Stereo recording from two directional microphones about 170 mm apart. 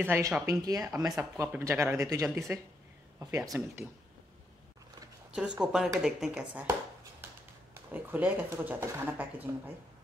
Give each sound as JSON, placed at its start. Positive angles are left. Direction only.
{"t": 0.0, "sound": "speech", "side_deg": -10}
{"t": 5.3, "sound": "speech", "side_deg": -5}